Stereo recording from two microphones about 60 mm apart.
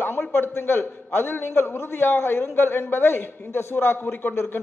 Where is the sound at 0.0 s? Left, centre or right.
Left.